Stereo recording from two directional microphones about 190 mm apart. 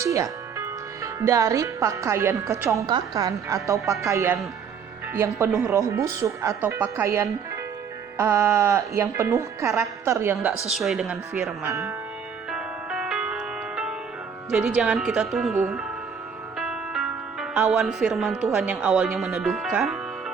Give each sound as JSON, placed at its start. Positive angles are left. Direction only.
{"t": 0.0, "sound": "speech", "side_deg": -15}
{"t": 10.7, "sound": "speech", "side_deg": 0}
{"t": 11.7, "sound": "speech", "side_deg": -15}
{"t": 12.5, "sound": "music", "side_deg": -5}
{"t": 14.5, "sound": "speech", "side_deg": -5}
{"t": 16.6, "sound": "music", "side_deg": -5}
{"t": 18.5, "sound": "speech", "side_deg": -5}